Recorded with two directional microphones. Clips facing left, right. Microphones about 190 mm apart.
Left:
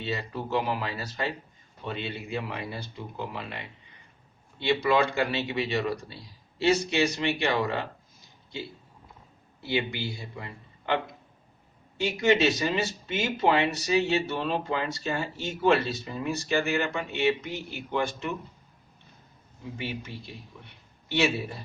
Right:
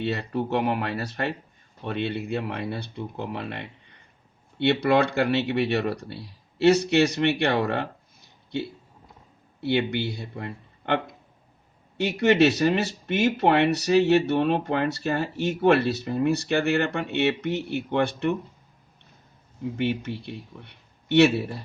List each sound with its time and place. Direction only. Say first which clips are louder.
0.0 s a man's voice: right 6 dB; 60° right (ahead or behind)
19.7 s a man's voice: right 9 dB; 65° right (ahead or behind)